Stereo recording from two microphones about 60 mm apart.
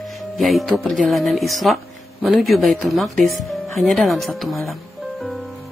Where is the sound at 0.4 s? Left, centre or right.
Centre.